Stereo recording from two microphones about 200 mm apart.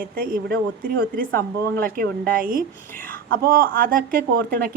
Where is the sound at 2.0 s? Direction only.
45° right (ahead or behind).